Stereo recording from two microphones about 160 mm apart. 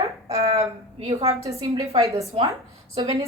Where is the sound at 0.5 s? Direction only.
40° right (ahead or behind).